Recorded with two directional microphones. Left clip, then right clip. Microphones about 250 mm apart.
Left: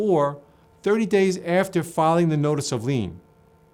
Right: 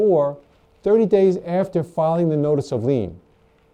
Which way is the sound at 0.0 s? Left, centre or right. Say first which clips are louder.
Right 4 dB; right.